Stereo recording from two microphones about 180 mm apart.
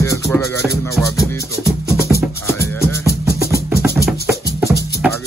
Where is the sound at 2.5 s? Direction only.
15° left (ahead or behind).